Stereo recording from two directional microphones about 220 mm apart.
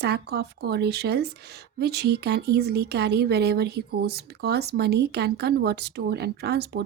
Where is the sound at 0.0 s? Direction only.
50° right (ahead or behind).